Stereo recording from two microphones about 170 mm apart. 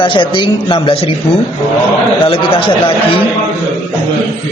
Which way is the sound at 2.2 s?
30° left (ahead or behind).